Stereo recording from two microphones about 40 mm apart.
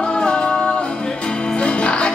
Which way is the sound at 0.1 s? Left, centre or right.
Left.